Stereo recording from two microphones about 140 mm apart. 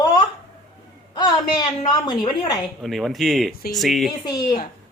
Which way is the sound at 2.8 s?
Centre (ahead or behind).